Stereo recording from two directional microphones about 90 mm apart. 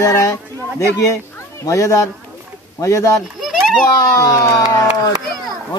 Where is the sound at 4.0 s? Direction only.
40° left (ahead or behind).